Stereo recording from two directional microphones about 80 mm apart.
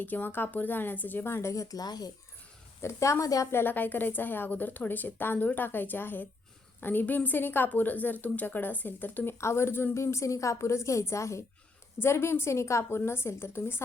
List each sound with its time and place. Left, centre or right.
0.0 s a woman's voice: left
2.8 s a woman's voice: left
3.5 s a woman's voice: left
9.4 s a woman's voice: left